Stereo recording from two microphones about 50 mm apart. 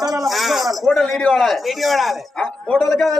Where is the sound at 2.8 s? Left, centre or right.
Centre.